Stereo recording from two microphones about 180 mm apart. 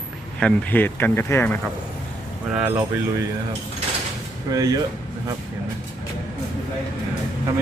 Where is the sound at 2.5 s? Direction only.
10° right (ahead or behind).